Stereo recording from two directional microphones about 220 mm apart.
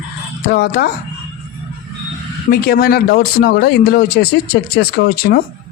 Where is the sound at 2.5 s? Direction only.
45° left (ahead or behind).